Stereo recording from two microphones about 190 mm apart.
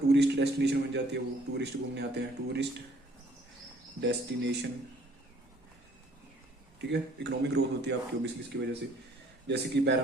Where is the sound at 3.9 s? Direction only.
65° right (ahead or behind).